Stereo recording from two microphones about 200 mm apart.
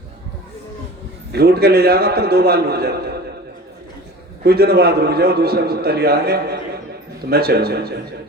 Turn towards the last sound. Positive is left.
turn(degrees=-50)  # may be behind; listen again after turning